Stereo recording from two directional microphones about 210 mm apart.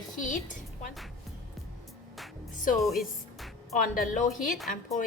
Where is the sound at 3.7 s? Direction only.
40° left (ahead or behind).